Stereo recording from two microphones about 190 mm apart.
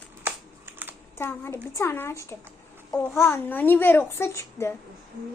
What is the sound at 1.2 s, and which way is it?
A child's voice, 10° left (ahead or behind).